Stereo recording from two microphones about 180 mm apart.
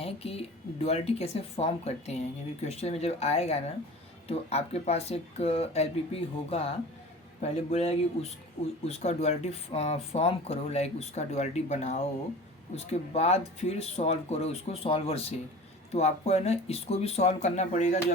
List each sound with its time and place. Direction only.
0.0 s speech: 35° left (ahead or behind)